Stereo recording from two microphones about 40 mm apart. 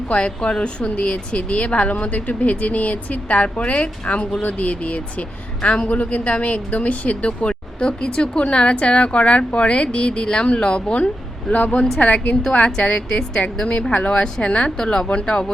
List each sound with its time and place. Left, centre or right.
0.1 s a woman's voice: left
11.5 s speech: left
12.5 s a woman's voice: left